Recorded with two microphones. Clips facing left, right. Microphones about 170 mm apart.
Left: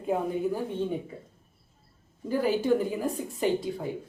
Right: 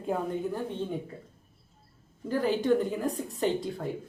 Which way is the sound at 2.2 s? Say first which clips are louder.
Left 1 dB; 10° left (ahead or behind).